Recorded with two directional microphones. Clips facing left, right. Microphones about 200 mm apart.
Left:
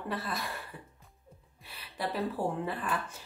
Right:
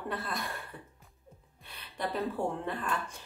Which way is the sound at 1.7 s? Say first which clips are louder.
Even; 5° left (ahead or behind).